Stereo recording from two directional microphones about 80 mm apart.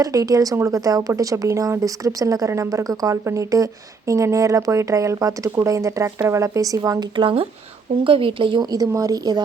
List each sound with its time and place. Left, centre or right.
0.0 s a woman's voice: right
8.0 s speech: right
8.7 s a woman's voice: right